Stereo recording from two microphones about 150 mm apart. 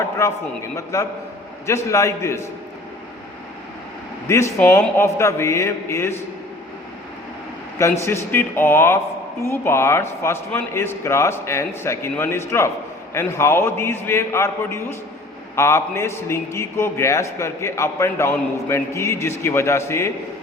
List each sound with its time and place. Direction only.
0.6 s a man's voice: 20° left (ahead or behind)
4.3 s a man's voice: 20° left (ahead or behind)
7.8 s a man's voice: 20° left (ahead or behind)